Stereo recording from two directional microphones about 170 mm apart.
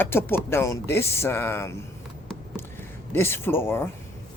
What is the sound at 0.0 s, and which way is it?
Speech, 15° left (ahead or behind).